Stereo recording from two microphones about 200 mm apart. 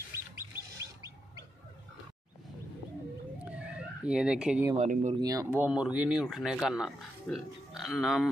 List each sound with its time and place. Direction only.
0.1 s a sound: 15° right (ahead or behind)
3.4 s fowl: 5° right (ahead or behind)
4.7 s speech: 35° right (ahead or behind)
5.2 s speech: 15° right (ahead or behind); by 8.3 s centre (ahead or behind)